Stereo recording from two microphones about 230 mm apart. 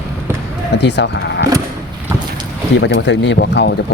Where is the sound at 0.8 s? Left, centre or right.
Left.